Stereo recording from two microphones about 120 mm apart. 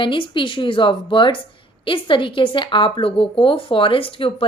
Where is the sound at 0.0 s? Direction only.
45° left (ahead or behind).